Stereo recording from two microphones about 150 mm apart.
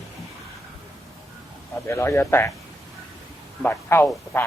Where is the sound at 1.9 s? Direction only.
15° left (ahead or behind).